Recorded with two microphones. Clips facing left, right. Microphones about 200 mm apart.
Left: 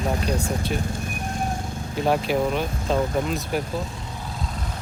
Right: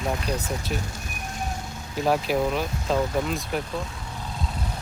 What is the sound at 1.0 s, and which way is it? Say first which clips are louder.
Horse: left 6 dB; 50° left (ahead or behind).